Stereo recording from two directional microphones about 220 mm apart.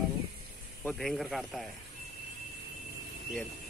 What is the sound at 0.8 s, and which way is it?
Speech, centre (ahead or behind).